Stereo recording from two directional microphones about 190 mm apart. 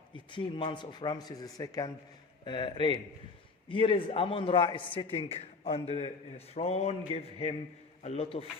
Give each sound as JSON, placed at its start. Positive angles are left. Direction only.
{"t": 0.1, "sound": "a man's voice", "side_deg": 25}